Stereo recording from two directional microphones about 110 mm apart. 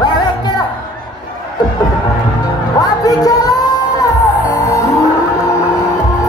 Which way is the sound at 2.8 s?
35° left (ahead or behind).